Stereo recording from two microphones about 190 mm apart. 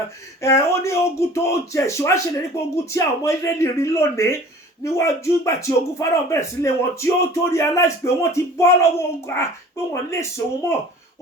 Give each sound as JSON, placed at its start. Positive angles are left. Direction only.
{"t": 0.4, "sound": "speech", "side_deg": 15}